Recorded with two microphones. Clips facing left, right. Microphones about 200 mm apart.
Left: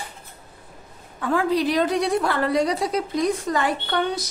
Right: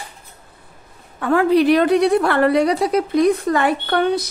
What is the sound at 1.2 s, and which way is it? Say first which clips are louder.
A woman's voice: right 7 dB; 65° right (ahead or behind).